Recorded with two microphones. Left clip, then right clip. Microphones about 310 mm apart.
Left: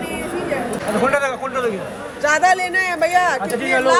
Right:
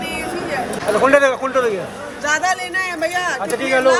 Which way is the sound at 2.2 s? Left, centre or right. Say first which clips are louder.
Left 3 dB; centre.